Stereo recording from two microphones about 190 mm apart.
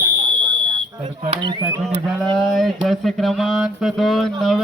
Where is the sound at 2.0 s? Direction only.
Centre (ahead or behind).